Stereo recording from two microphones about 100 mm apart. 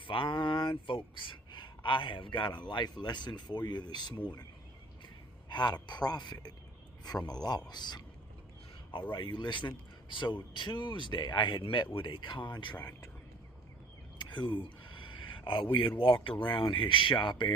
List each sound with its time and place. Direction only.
0.0 s a man's voice: 60° left (ahead or behind)
5.5 s speech: 45° left (ahead or behind)
9.1 s speech: 50° left (ahead or behind)
12.7 s speech: 20° left (ahead or behind)
14.2 s a sound: 50° left (ahead or behind)
16.4 s speech: 55° left (ahead or behind)